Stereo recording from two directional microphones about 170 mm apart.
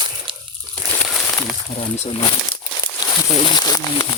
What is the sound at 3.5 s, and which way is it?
Speech, 25° left (ahead or behind).